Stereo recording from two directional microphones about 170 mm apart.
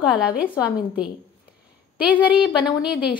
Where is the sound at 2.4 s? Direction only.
5° right (ahead or behind).